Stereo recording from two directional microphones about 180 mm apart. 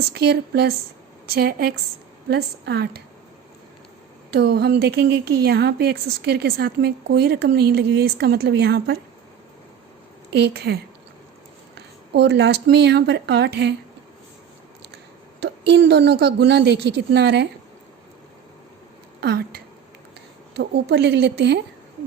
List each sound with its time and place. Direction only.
0.1 s a woman's voice: 65° right (ahead or behind)
4.3 s a woman's voice: 60° right (ahead or behind)
10.3 s a woman's voice: 65° right (ahead or behind)
12.1 s speech: 70° right (ahead or behind)
15.4 s a woman's voice: 75° right (ahead or behind)
19.2 s a woman's voice: 60° right (ahead or behind)